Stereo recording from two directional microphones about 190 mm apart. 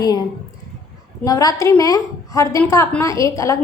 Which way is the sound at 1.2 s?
20° left (ahead or behind).